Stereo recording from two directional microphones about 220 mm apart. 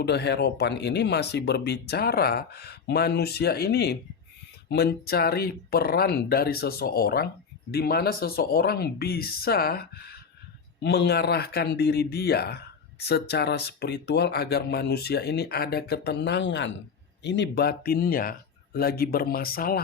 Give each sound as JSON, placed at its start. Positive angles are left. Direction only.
{"t": 0.0, "sound": "speech", "side_deg": 50}